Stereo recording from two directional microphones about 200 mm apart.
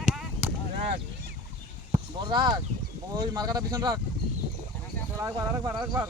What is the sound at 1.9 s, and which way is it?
Speech, 20° right (ahead or behind).